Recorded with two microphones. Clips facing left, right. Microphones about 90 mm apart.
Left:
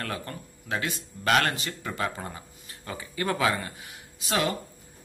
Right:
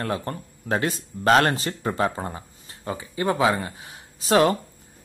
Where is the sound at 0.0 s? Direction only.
30° right (ahead or behind).